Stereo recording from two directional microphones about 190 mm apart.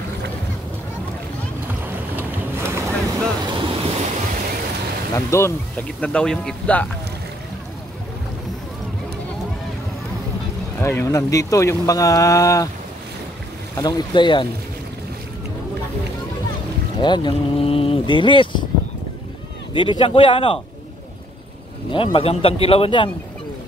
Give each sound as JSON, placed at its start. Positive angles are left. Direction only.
{"t": 2.1, "sound": "boat", "side_deg": -10}
{"t": 3.8, "sound": "waves", "side_deg": -30}
{"t": 5.1, "sound": "speech", "side_deg": 15}
{"t": 10.8, "sound": "speech", "side_deg": 15}
{"t": 13.7, "sound": "speech", "side_deg": 20}
{"t": 17.0, "sound": "speech", "side_deg": 25}
{"t": 19.7, "sound": "speech", "side_deg": 25}
{"t": 21.9, "sound": "speech", "side_deg": 30}